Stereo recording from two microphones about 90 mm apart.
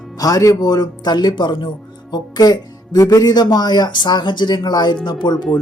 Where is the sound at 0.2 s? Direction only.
45° left (ahead or behind).